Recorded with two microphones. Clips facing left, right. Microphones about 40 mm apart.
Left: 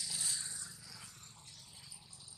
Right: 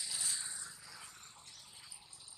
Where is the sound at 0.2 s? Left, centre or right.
Centre.